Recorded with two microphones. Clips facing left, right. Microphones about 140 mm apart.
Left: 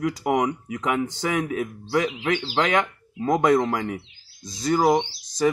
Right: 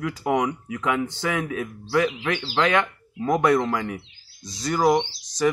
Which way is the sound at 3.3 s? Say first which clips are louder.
Left 1 dB; 45° left (ahead or behind).